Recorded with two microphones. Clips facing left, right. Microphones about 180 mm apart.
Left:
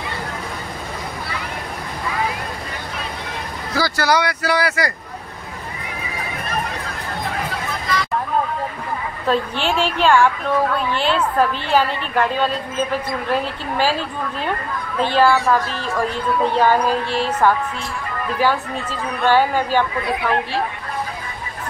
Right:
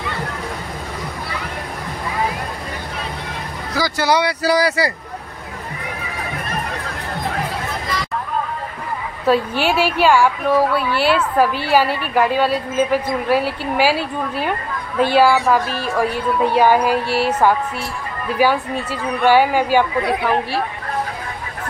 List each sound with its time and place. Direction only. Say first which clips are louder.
3.7 s speech: right 1 dB; 20° right (ahead or behind)
9.2 s a woman's voice: right 4 dB; 10° right (ahead or behind)